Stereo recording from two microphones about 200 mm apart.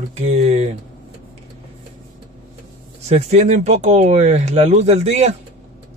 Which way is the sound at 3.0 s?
35° right (ahead or behind).